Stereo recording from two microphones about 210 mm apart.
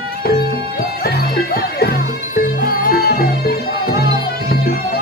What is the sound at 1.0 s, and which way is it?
Music, 50° left (ahead or behind).